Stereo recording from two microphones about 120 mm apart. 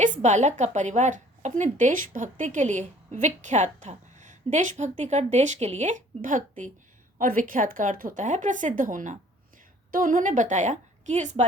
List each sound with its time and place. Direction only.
0.0 s a woman's voice: 85° right